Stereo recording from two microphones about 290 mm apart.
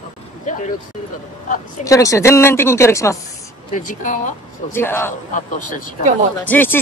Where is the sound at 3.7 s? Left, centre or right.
Left.